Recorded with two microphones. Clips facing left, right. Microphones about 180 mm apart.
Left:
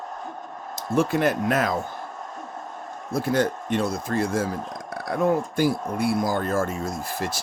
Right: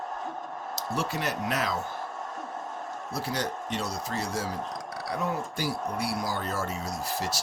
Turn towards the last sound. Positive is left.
turn(degrees=50)  # may be behind; listen again after turning